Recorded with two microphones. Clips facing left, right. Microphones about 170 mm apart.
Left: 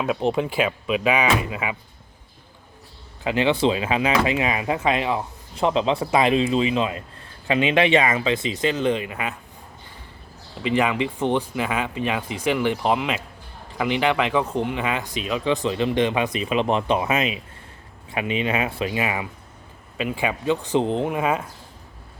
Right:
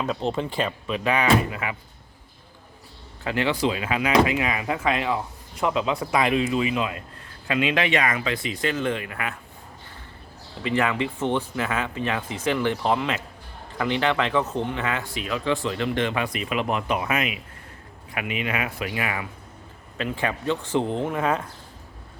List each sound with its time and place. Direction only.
0.0 s speech: 15° left (ahead or behind)
3.2 s speech: 20° left (ahead or behind)
10.6 s speech: 15° left (ahead or behind)